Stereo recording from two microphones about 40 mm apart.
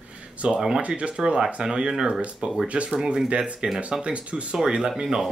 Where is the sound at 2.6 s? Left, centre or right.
Right.